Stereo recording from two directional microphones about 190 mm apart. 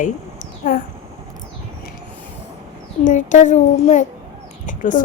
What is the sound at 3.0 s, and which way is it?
A child's voice, 40° left (ahead or behind).